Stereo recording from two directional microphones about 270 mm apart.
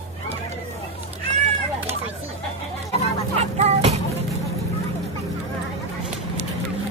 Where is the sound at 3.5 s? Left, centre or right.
Right.